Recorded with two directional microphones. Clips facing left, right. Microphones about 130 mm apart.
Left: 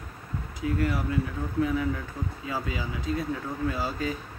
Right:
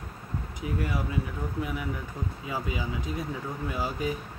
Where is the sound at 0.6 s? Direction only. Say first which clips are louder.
Left 4 dB; 15° right (ahead or behind).